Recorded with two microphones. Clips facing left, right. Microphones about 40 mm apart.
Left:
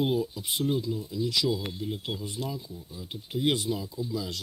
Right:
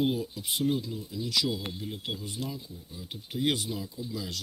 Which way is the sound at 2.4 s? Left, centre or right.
Centre.